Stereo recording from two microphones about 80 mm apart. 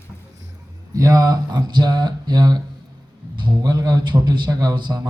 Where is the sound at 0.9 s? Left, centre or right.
Right.